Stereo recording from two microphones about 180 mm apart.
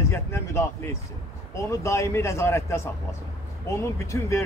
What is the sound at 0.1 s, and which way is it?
Speech, 15° left (ahead or behind).